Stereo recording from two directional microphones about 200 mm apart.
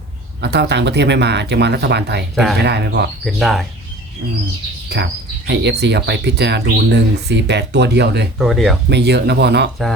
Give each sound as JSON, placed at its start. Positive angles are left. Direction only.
{"t": 0.4, "sound": "speech", "side_deg": -60}
{"t": 2.3, "sound": "speech", "side_deg": 0}
{"t": 2.6, "sound": "speech", "side_deg": -55}
{"t": 3.2, "sound": "speech", "side_deg": 0}
{"t": 4.9, "sound": "speech", "side_deg": -55}
{"t": 8.4, "sound": "speech", "side_deg": 0}
{"t": 8.9, "sound": "speech", "side_deg": -55}